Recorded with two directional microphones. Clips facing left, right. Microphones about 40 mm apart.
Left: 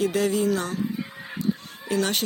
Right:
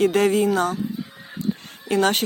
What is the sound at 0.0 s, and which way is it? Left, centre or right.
Speech, right.